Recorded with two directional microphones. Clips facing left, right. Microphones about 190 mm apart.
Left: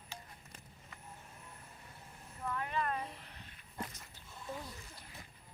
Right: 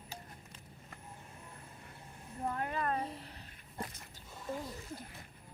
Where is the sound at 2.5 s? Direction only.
45° right (ahead or behind).